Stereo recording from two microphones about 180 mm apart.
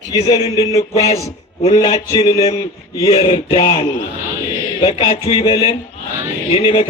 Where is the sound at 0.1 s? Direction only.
20° left (ahead or behind).